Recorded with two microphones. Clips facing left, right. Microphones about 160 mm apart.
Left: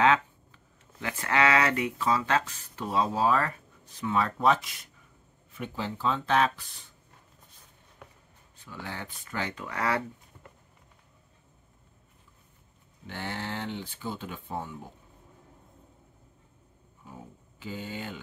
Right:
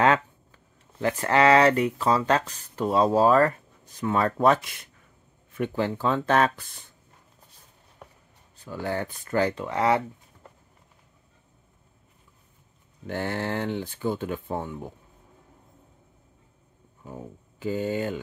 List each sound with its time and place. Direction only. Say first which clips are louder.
0.0 s a sound: right 2 dB; 45° right (ahead or behind)
0.9 s speech: right 6 dB; 35° right (ahead or behind)
5.6 s speech: right 7 dB; 55° right (ahead or behind)
8.6 s speech: right 10 dB; 45° right (ahead or behind); by 10.0 s 20° right (ahead or behind)
13.0 s speech: right 7 dB; 50° right (ahead or behind)
17.0 s speech: right 7 dB; 50° right (ahead or behind)